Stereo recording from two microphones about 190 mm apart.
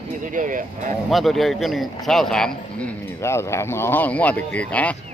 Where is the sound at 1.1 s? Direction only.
Centre (ahead or behind).